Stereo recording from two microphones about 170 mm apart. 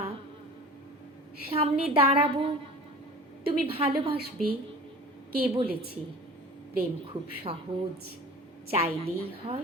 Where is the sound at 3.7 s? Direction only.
35° right (ahead or behind).